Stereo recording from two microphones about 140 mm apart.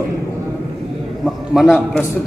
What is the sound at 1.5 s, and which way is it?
Speech, centre (ahead or behind).